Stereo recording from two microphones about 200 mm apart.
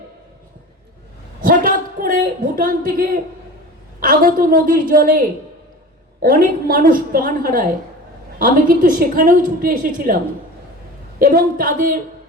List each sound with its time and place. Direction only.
1.4 s a sound: 45° right (ahead or behind)
4.0 s a woman's voice: 45° right (ahead or behind)
6.2 s a woman's voice: 45° right (ahead or behind)
11.2 s a woman's voice: 45° right (ahead or behind)